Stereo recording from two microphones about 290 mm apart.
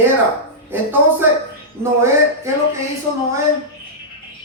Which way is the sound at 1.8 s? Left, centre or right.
Centre.